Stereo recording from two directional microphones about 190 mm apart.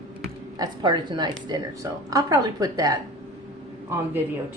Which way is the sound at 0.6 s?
25° right (ahead or behind).